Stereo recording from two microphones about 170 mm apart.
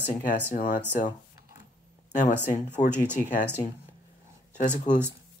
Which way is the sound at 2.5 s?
45° left (ahead or behind).